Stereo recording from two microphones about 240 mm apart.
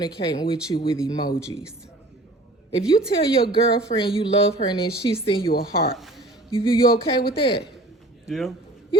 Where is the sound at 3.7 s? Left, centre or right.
Left.